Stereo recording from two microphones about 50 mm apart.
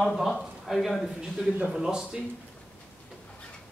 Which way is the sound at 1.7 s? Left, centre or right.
Centre.